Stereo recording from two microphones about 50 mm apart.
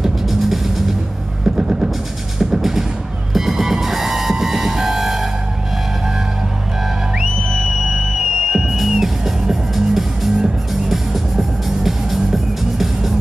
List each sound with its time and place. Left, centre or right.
0.0 s music: centre
1.4 s music: centre
7.4 s music: centre